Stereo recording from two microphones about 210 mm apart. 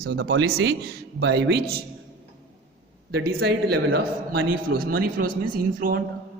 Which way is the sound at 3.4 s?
50° right (ahead or behind).